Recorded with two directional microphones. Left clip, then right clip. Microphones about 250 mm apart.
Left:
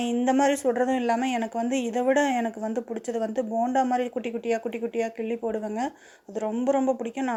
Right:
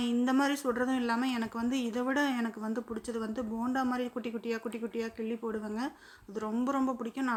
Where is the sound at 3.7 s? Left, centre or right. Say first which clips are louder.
Left 9 dB; centre.